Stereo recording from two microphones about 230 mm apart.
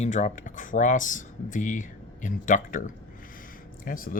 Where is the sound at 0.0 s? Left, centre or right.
Left.